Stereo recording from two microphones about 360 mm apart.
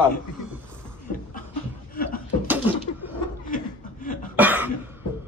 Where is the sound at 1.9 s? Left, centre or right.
Left.